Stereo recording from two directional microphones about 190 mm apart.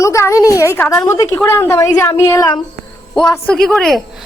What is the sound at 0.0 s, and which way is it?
A woman's voice, 15° left (ahead or behind).